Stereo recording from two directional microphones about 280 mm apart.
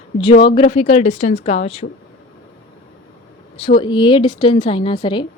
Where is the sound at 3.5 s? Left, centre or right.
Centre.